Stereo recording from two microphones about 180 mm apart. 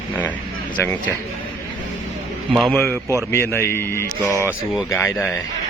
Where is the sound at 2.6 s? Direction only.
Centre (ahead or behind).